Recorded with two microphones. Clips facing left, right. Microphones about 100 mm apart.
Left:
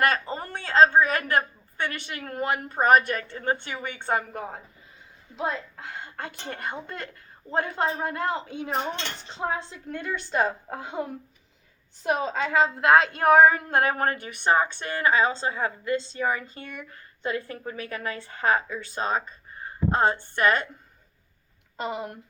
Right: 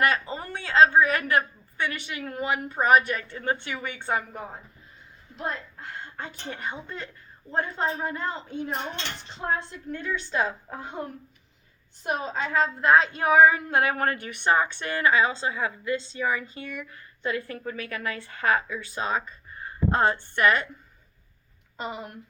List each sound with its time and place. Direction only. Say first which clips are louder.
0.0 s a woman's voice: left 1 dB; 40° left (ahead or behind)
5.4 s a woman's voice: left 3 dB; 90° left
9.6 s a woman's voice: even; 75° left (ahead or behind); by 10.8 s 50° left (ahead or behind)
10.8 s speech: left 3 dB; 90° left
12.0 s a woman's voice: left 3 dB; 90° left; by 20.7 s 30° left (ahead or behind)
21.8 s speech: left 4 dB; 90° left